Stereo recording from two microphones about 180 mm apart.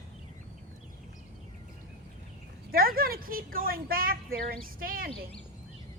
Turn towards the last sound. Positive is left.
turn(degrees=-50)  # may be behind; listen again after turning